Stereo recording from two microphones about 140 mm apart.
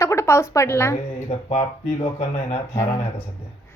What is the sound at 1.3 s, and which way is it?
Speech, 45° left (ahead or behind).